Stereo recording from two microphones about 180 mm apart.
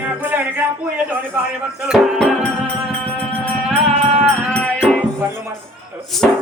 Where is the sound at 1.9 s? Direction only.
Centre (ahead or behind).